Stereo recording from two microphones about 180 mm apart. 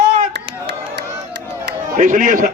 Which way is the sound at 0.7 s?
70° right (ahead or behind).